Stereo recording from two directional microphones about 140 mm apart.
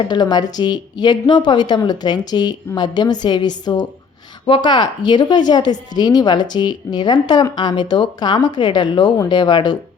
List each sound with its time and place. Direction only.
0.1 s a woman's voice: 30° left (ahead or behind)